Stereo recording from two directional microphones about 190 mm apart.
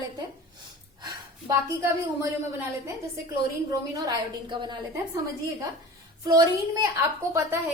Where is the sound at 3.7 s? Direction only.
20° right (ahead or behind).